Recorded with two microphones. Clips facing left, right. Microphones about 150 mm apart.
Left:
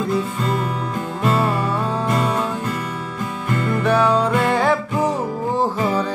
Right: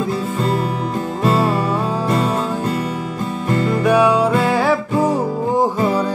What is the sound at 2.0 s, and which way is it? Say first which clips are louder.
Music: right 2 dB; 30° right (ahead or behind).